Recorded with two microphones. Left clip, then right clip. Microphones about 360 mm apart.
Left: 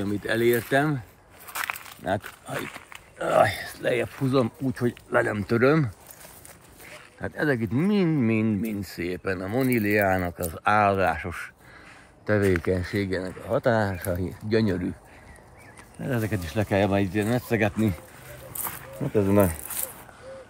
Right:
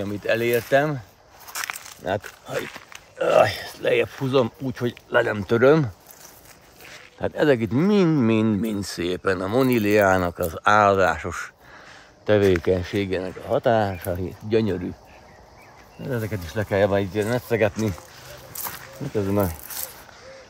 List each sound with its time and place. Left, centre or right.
0.0 s speech: centre
1.5 s a sound: centre
2.6 s speech: centre
3.2 s speech: right
7.2 s speech: centre
16.1 s speech: centre
18.6 s a sound: centre